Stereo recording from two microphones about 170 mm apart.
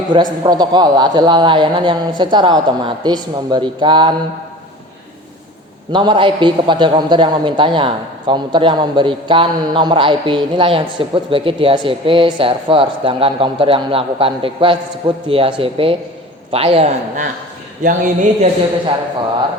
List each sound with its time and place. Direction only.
0.1 s a man's voice: 25° right (ahead or behind)
5.9 s a man's voice: 30° right (ahead or behind)
17.8 s speech: 50° right (ahead or behind)